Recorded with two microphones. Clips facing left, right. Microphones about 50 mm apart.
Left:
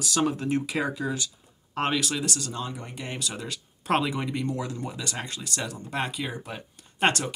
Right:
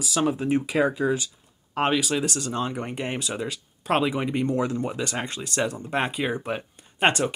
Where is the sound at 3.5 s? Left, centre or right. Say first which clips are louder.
Left 1 dB; centre.